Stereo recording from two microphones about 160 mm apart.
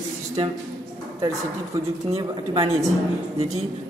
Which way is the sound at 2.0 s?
40° right (ahead or behind).